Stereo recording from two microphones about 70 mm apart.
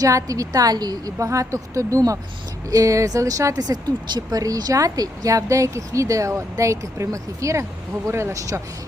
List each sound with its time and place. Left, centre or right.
0.0 s a woman's voice: right